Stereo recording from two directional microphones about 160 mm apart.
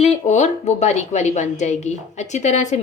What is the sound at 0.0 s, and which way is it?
A woman's voice, 45° left (ahead or behind).